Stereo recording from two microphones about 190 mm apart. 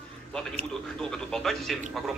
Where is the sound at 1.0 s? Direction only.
5° left (ahead or behind).